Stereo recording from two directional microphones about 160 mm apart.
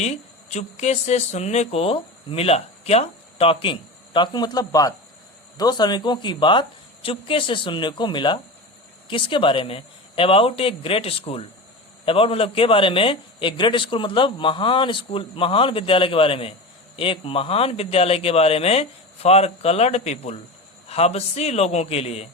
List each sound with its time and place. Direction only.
0.0 s a man's voice: 45° left (ahead or behind)